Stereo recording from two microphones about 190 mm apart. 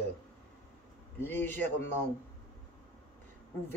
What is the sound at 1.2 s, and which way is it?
Speech, 10° left (ahead or behind).